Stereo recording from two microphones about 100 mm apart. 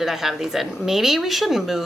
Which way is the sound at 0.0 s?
5° right (ahead or behind).